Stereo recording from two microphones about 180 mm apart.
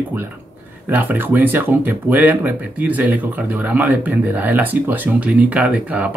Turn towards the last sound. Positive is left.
turn(degrees=-5)  # may be behind; listen again after turning